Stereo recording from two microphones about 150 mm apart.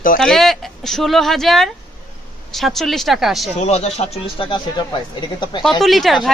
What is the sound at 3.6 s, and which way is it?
Speech, 45° left (ahead or behind).